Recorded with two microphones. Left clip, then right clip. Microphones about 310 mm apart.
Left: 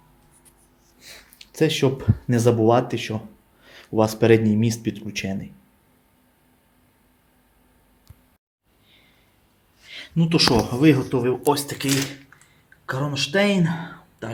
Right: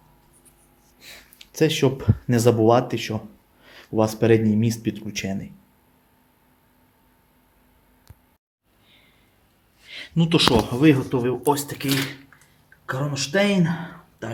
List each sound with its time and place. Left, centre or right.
0.9 s speech: centre
9.8 s speech: centre
12.4 s a sound: centre